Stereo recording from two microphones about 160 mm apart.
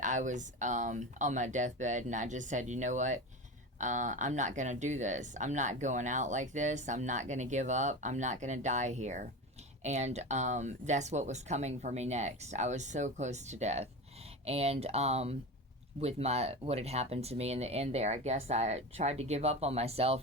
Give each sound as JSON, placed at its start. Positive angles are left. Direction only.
{"t": 0.0, "sound": "speech", "side_deg": -50}